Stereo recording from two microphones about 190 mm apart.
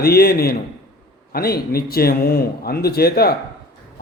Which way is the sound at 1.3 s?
55° left (ahead or behind).